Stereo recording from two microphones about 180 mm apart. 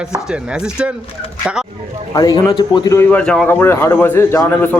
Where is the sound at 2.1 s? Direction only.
20° left (ahead or behind).